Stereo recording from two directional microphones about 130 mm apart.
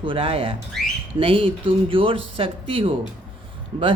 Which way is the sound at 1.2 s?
45° right (ahead or behind).